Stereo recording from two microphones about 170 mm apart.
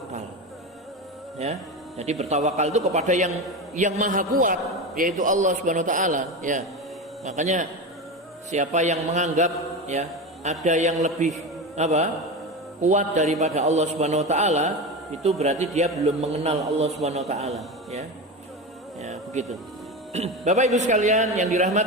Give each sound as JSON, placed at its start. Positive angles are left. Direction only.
{"t": 2.0, "sound": "a man's voice", "side_deg": -40}
{"t": 18.9, "sound": "a man's voice", "side_deg": -40}